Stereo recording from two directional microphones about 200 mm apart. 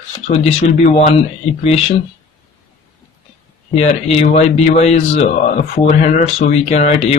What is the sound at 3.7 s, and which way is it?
Speech, 35° left (ahead or behind).